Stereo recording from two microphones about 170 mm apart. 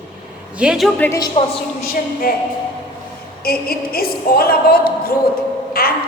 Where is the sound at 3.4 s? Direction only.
60° left (ahead or behind).